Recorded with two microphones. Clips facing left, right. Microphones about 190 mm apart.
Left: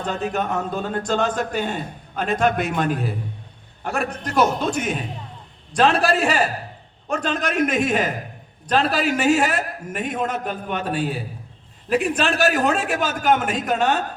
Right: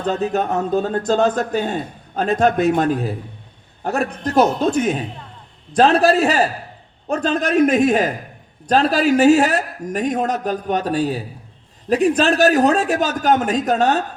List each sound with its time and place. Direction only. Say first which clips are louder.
0.0 s a man's voice: right 5 dB; 35° right (ahead or behind)